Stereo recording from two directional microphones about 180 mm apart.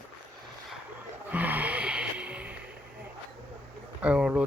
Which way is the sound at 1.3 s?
10° right (ahead or behind).